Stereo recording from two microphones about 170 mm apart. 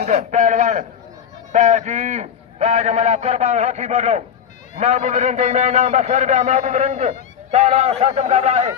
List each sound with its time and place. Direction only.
0.0 s a man's voice: 40° right (ahead or behind)